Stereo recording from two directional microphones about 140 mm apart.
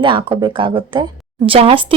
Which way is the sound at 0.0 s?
35° right (ahead or behind).